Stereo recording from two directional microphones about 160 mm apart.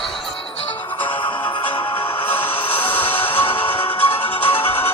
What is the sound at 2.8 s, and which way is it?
Music, 10° left (ahead or behind).